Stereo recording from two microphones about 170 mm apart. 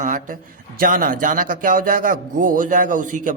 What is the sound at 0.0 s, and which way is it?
A man's voice, 50° right (ahead or behind).